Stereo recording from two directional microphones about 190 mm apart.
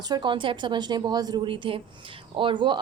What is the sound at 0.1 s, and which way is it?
A woman's voice, 25° right (ahead or behind).